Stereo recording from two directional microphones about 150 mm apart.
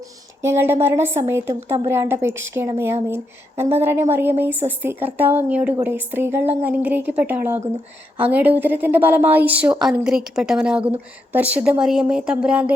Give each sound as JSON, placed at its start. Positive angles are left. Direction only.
{"t": 0.4, "sound": "a woman's voice", "side_deg": -15}